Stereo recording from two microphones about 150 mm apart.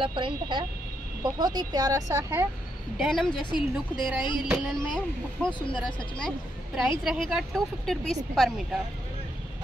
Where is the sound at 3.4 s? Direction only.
30° left (ahead or behind).